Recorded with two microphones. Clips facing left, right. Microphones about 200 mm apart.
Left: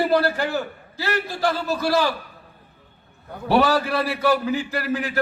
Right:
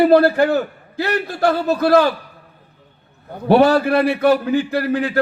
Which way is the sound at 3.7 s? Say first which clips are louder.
Right 7 dB; 60° right (ahead or behind).